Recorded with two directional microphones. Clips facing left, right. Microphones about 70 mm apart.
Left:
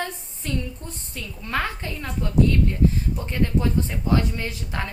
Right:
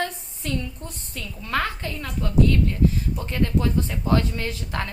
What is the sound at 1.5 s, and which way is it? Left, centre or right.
Speech, left.